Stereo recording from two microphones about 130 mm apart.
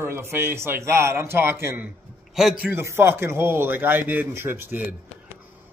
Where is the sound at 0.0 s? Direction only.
20° right (ahead or behind).